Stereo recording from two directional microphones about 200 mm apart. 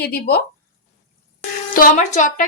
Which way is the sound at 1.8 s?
40° left (ahead or behind).